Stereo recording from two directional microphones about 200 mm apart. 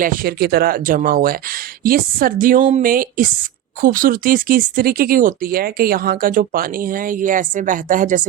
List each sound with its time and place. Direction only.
0.0 s speech: 45° right (ahead or behind)